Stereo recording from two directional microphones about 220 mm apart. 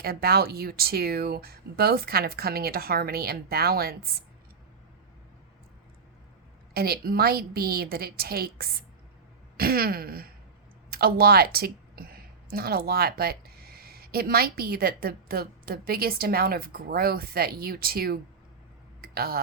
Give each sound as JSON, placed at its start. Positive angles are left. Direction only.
{"t": 0.0, "sound": "speech", "side_deg": -45}
{"t": 6.7, "sound": "a woman's voice", "side_deg": -45}
{"t": 19.0, "sound": "a sound", "side_deg": -45}